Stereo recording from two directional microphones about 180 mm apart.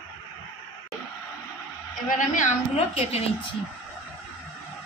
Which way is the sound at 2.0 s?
45° left (ahead or behind).